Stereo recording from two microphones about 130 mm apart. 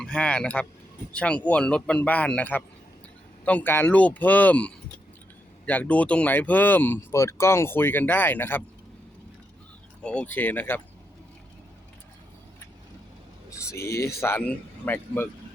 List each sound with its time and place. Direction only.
0.0 s speech: 10° left (ahead or behind)
10.0 s speech: 10° left (ahead or behind)
13.7 s speech: 20° left (ahead or behind)